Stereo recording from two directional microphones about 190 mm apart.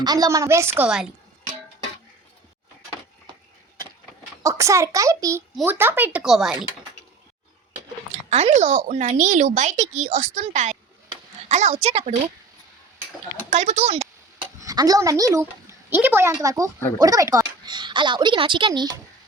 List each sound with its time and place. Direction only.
0.0 s a woman's voice: 20° right (ahead or behind); by 1.1 s 5° right (ahead or behind)
4.4 s a woman's voice: 15° right (ahead or behind)
8.3 s speech: 35° right (ahead or behind)
13.5 s speech: 40° right (ahead or behind)
14.6 s a woman's voice: 20° right (ahead or behind)